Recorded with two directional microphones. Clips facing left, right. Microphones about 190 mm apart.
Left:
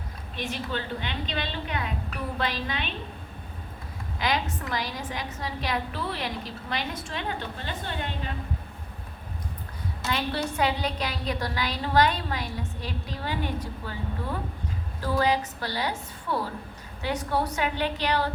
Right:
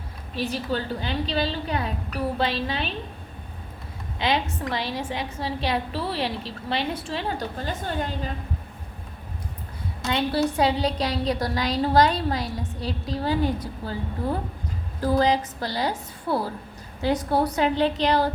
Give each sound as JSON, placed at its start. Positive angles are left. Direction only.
{"t": 0.3, "sound": "a woman's voice", "side_deg": -35}
{"t": 4.2, "sound": "a woman's voice", "side_deg": -25}
{"t": 10.1, "sound": "a woman's voice", "side_deg": -30}